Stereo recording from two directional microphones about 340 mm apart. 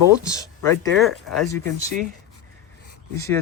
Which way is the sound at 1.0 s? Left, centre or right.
Centre.